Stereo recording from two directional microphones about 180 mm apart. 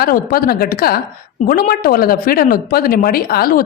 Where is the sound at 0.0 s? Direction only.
55° left (ahead or behind).